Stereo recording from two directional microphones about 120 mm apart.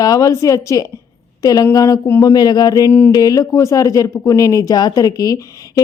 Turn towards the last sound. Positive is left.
turn(degrees=30)  # may be behind; listen again after turning